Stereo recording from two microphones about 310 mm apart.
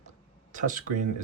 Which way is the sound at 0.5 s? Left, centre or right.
Right.